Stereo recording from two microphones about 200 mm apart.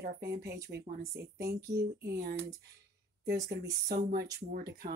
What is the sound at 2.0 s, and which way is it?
Speech, 55° right (ahead or behind).